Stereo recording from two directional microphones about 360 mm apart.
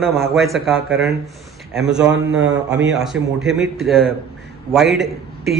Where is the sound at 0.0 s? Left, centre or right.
Centre.